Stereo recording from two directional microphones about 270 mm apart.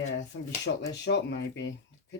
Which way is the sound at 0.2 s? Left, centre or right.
Left.